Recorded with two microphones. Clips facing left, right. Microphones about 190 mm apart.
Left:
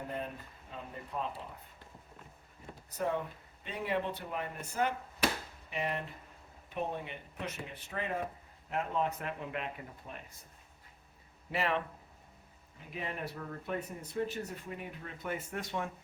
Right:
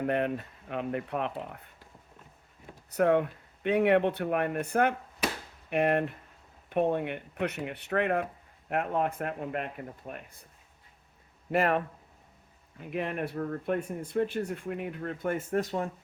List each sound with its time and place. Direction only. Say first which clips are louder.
0.0 s speech: right 11 dB; 75° right (ahead or behind)
2.9 s speech: right 10 dB; 70° right (ahead or behind)
11.5 s speech: right 7 dB; 50° right (ahead or behind)
12.9 s speech: right 8 dB; 65° right (ahead or behind); by 15.9 s 40° right (ahead or behind)